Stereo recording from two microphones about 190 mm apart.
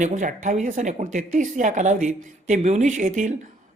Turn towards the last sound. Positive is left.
turn(degrees=-40)  # may be behind; listen again after turning